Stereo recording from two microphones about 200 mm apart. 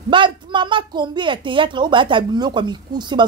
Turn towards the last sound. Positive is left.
turn(degrees=-20)  # may be behind; listen again after turning